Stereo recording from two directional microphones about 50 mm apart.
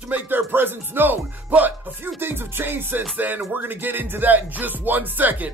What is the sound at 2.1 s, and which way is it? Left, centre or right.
Speech, right.